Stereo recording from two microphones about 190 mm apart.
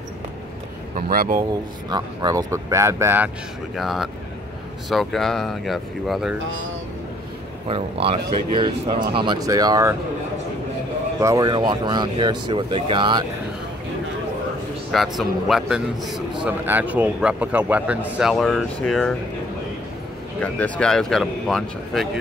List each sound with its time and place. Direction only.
1.1 s speech: 50° right (ahead or behind)
1.9 s a man's voice: 20° right (ahead or behind)
3.7 s speech: centre (ahead or behind)
7.6 s speech: 30° right (ahead or behind)
11.1 s speech: 20° right (ahead or behind)
14.9 s a man's voice: centre (ahead or behind)
20.4 s speech: 10° left (ahead or behind)